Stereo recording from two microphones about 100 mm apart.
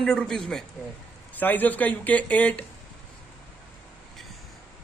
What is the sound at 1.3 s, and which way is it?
Speech, 15° left (ahead or behind).